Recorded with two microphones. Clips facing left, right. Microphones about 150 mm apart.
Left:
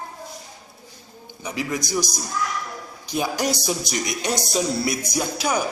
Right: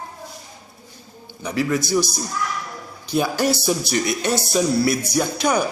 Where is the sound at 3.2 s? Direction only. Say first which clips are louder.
Right 4 dB; 15° left (ahead or behind).